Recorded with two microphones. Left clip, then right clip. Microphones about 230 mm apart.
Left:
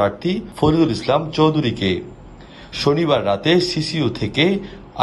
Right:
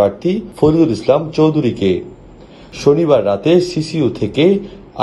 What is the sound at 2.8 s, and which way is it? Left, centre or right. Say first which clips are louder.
A man's voice: right 6 dB; left.